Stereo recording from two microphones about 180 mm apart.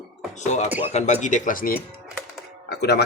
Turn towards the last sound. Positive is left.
turn(degrees=65)  # may be behind; listen again after turning